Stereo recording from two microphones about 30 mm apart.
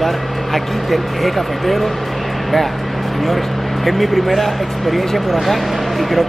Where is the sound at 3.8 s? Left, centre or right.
Centre.